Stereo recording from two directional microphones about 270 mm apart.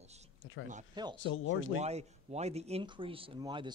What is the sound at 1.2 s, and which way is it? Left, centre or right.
Speech, left.